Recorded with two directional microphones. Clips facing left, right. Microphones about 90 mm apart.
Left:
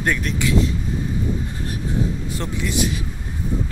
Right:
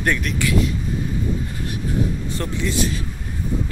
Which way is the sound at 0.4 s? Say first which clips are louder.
Left 1 dB; 25° left (ahead or behind).